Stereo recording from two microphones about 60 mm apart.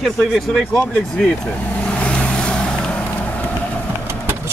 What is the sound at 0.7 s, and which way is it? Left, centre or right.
Speech, left.